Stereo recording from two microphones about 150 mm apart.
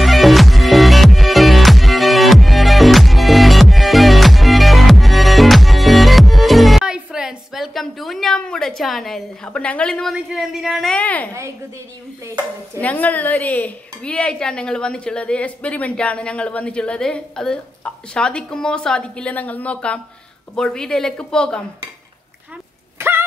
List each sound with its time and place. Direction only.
0.0 s music: centre (ahead or behind)
12.8 s speech: 10° left (ahead or behind)
22.9 s bow-wow: 15° right (ahead or behind)